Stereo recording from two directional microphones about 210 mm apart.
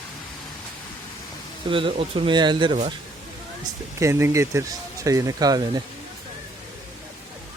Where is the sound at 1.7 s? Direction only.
25° right (ahead or behind).